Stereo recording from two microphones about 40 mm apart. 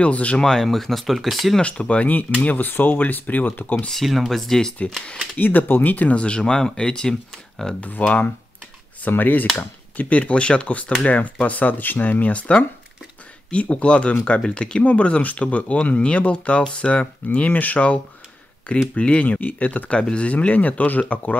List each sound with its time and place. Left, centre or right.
0.0 s speech: left
0.4 s speech: centre
1.6 s speech: left
2.4 s speech: left
3.9 s speech: centre
5.4 s speech: left
6.1 s speech: left
7.8 s speech: left
9.1 s speech: left